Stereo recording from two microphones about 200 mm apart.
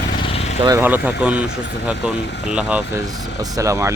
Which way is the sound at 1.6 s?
60° left (ahead or behind).